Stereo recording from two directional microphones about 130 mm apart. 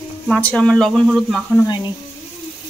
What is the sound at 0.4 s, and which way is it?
Speech, 10° left (ahead or behind).